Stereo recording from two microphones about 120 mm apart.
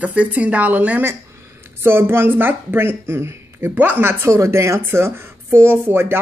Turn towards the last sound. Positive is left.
turn(degrees=-20)  # may be behind; listen again after turning